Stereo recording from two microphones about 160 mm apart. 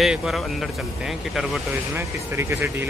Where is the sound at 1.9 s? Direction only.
15° right (ahead or behind).